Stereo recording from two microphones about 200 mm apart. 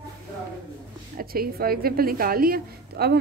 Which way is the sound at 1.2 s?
50° right (ahead or behind).